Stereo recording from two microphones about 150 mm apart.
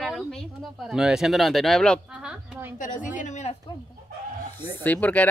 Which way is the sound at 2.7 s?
60° left (ahead or behind).